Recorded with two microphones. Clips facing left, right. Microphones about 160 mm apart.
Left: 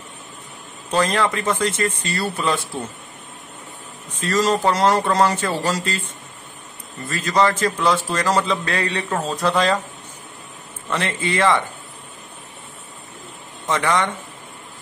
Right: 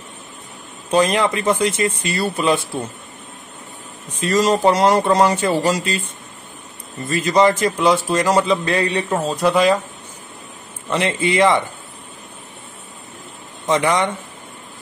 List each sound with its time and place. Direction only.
0.9 s a man's voice: 20° right (ahead or behind)
4.2 s a man's voice: 15° right (ahead or behind)
7.1 s a man's voice: 15° right (ahead or behind)
10.9 s a man's voice: 20° right (ahead or behind)
13.7 s a man's voice: 20° right (ahead or behind)